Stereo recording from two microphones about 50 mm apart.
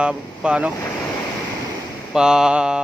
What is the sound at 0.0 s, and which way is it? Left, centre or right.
Speech, right.